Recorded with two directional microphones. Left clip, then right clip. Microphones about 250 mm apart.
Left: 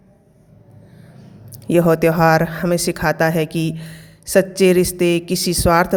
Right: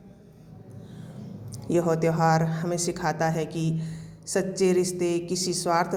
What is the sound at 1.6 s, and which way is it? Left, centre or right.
Speech, left.